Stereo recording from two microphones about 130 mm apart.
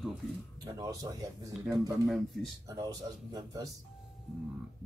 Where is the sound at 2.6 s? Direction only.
30° right (ahead or behind).